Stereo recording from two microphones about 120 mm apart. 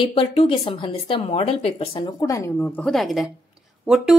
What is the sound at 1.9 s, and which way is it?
Speech, 35° left (ahead or behind).